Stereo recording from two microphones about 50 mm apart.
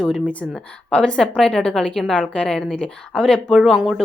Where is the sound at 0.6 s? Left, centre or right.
Centre.